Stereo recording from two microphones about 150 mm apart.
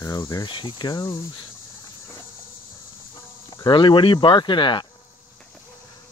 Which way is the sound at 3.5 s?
30° left (ahead or behind).